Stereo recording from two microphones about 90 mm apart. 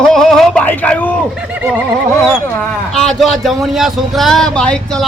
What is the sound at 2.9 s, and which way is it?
Speech, 5° left (ahead or behind).